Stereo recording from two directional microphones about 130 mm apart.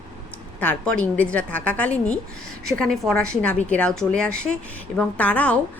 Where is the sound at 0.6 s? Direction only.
10° left (ahead or behind).